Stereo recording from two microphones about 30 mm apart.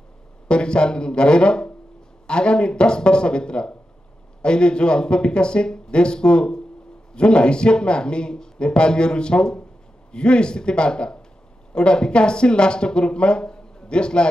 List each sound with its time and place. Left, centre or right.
0.5 s speech: left